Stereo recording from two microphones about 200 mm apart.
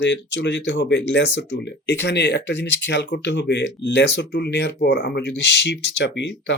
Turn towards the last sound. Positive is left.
turn(degrees=60)  # may be behind; listen again after turning